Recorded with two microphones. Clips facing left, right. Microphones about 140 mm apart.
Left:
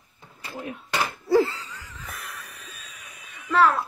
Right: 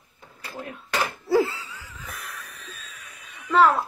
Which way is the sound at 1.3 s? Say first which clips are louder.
Left 1 dB; 10° right (ahead or behind).